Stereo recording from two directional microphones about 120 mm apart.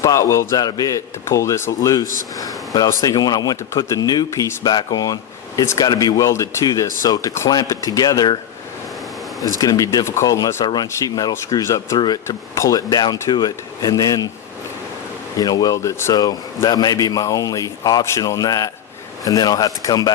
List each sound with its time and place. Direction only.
0.0 s a man's voice: 25° left (ahead or behind)
9.6 s a man's voice: 30° left (ahead or behind)
11.9 s speech: 40° left (ahead or behind)
15.4 s speech: 35° left (ahead or behind)
16.6 s a man's voice: 35° left (ahead or behind)